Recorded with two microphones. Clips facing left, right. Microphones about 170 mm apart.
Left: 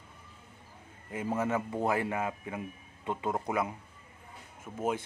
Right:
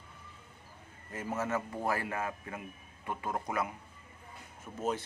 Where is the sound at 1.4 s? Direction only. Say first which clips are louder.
Left 3 dB; 15° left (ahead or behind).